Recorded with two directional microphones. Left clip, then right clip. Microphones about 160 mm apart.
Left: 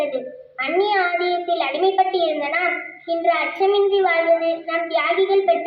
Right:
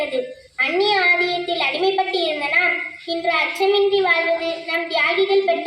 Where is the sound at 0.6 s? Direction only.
15° right (ahead or behind).